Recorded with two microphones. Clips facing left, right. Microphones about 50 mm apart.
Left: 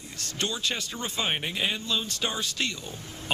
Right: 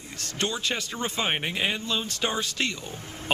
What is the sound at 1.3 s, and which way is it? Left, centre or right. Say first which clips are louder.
Speech: right 2 dB; right.